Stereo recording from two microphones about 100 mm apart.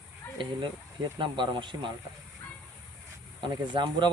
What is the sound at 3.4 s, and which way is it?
Speech, 50° right (ahead or behind).